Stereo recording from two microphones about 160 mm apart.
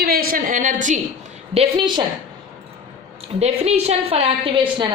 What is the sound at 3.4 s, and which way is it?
A woman's voice, 40° right (ahead or behind).